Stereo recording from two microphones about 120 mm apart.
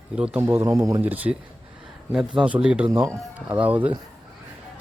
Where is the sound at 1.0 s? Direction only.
15° right (ahead or behind).